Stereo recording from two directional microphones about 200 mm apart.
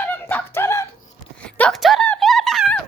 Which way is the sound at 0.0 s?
10° left (ahead or behind).